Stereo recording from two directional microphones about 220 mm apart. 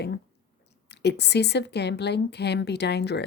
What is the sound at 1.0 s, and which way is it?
Speech, 50° left (ahead or behind).